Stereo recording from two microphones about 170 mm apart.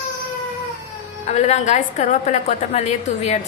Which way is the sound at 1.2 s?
45° left (ahead or behind).